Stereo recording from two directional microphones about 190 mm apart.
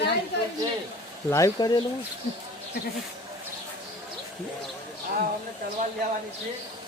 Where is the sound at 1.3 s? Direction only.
15° left (ahead or behind).